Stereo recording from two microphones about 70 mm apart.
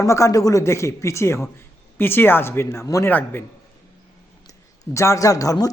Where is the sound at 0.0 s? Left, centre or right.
Left.